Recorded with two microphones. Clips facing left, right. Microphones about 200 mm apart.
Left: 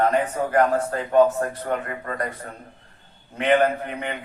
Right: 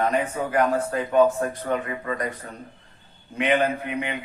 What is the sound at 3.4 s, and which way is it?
Speech, 50° left (ahead or behind).